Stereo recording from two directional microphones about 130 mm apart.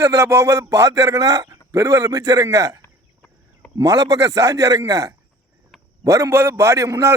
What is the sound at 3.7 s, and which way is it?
Speech, 30° right (ahead or behind).